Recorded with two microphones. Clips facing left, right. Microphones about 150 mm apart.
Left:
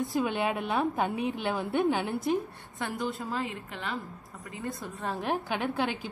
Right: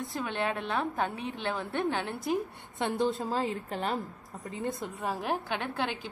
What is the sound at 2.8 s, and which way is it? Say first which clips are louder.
A woman's voice: right 4 dB; 25° right (ahead or behind).